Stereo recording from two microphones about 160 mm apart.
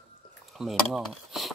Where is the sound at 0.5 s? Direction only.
Centre (ahead or behind).